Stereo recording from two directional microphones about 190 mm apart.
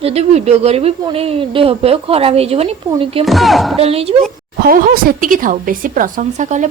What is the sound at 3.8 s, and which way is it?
Speech, 30° right (ahead or behind).